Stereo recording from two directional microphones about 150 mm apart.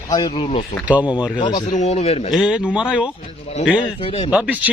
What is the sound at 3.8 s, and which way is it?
Speech, 40° left (ahead or behind).